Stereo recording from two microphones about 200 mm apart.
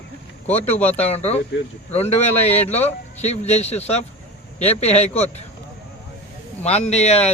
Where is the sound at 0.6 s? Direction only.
30° left (ahead or behind).